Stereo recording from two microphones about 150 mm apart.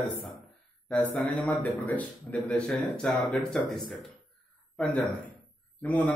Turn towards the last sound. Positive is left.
turn(degrees=10)  # may be behind; listen again after turning